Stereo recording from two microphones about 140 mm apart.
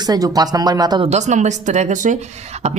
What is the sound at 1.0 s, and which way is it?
Speech, 55° right (ahead or behind).